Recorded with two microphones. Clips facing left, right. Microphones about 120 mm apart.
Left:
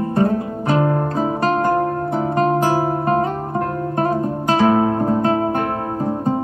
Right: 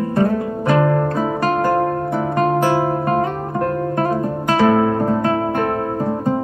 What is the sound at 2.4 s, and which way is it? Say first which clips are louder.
Guitar: right 1 dB; 30° left (ahead or behind).